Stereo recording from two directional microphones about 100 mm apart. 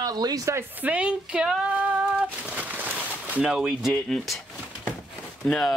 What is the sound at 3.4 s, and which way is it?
Speech, 5° right (ahead or behind).